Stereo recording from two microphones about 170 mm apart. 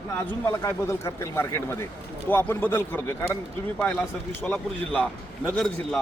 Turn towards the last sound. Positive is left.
turn(degrees=0)  # may be behind; listen again after turning